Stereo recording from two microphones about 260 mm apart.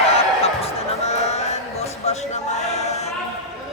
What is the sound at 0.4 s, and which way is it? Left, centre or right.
Music, left.